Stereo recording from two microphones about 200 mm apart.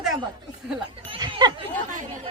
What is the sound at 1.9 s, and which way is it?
Speech, 40° right (ahead or behind).